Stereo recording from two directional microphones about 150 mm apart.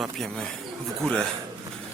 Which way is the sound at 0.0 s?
Centre (ahead or behind).